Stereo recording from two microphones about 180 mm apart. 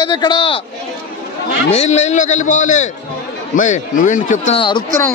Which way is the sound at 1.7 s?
40° left (ahead or behind).